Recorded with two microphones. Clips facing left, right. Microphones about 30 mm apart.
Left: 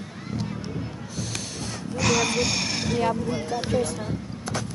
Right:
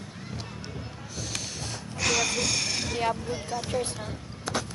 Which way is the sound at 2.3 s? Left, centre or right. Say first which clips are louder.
Left 3 dB; centre.